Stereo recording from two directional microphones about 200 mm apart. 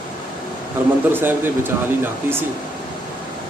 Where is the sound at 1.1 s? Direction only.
10° right (ahead or behind).